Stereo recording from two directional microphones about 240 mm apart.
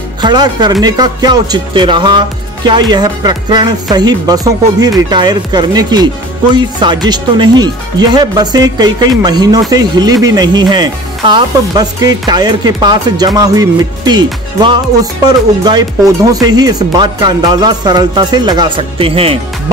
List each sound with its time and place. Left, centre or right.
0.2 s speech: centre